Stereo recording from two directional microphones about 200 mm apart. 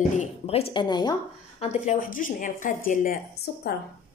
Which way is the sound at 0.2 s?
30° left (ahead or behind).